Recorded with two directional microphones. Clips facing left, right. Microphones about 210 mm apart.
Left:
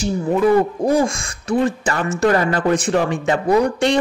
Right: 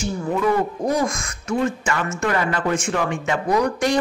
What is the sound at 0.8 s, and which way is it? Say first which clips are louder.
A woman's voice: left 4 dB; 30° left (ahead or behind).